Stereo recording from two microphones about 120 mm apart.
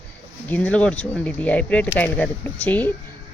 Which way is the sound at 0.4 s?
15° left (ahead or behind).